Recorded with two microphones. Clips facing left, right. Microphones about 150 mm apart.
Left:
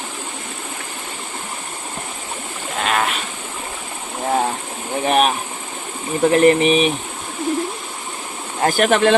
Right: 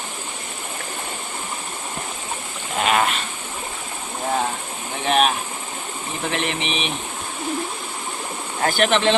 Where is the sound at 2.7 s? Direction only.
5° right (ahead or behind).